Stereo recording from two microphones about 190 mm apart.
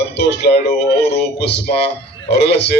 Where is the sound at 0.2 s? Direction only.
60° left (ahead or behind).